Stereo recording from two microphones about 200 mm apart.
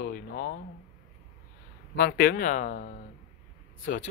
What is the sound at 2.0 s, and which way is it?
Speech, 50° left (ahead or behind).